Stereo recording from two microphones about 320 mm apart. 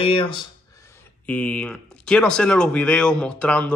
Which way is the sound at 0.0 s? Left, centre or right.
Centre.